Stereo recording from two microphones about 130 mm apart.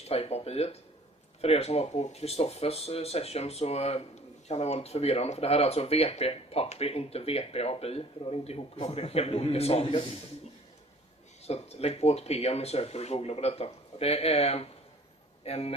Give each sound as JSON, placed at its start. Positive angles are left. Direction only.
{"t": 0.1, "sound": "speech", "side_deg": 50}
{"t": 11.4, "sound": "speech", "side_deg": 55}